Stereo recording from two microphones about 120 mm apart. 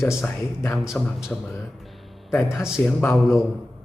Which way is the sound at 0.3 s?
20° left (ahead or behind).